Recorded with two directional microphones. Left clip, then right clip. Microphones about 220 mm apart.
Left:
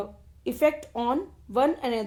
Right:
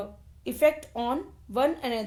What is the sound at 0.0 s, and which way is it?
Speech, 30° left (ahead or behind).